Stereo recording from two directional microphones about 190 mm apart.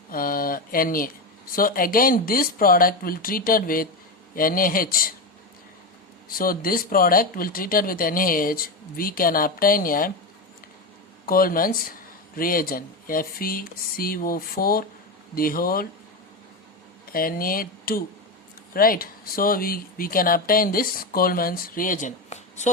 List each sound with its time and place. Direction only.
0.1 s a sound: 50° left (ahead or behind)
1.5 s speech: 50° left (ahead or behind)
6.2 s speech: 50° left (ahead or behind)
11.3 s speech: 50° left (ahead or behind)
17.1 s speech: 50° left (ahead or behind)